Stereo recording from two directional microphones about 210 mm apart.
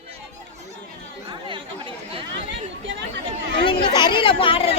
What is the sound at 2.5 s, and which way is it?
Chatter, 60° right (ahead or behind).